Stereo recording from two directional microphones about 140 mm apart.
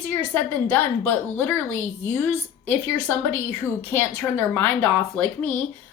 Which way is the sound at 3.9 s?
15° left (ahead or behind).